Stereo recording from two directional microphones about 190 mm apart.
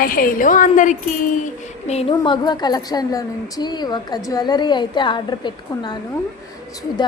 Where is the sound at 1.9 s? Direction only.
30° left (ahead or behind).